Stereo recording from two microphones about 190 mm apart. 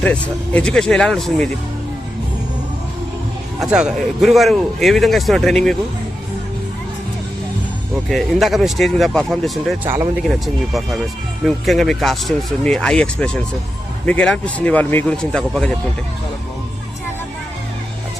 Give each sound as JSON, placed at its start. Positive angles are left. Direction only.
{"t": 0.0, "sound": "speech", "side_deg": 5}
{"t": 3.6, "sound": "speech", "side_deg": -5}
{"t": 8.1, "sound": "speech", "side_deg": 0}